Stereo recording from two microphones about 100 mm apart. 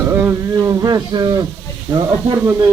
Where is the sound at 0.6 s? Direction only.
40° right (ahead or behind).